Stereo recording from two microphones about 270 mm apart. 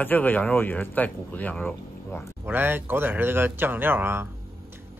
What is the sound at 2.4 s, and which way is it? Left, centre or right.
A man's voice, centre.